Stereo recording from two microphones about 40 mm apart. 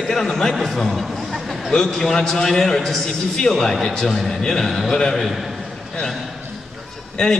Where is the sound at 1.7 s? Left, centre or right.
Centre.